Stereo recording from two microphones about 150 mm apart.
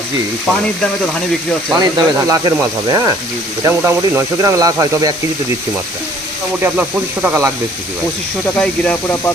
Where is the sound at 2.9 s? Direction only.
25° right (ahead or behind).